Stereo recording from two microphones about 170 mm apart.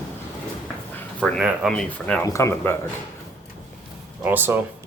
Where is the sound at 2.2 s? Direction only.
15° left (ahead or behind).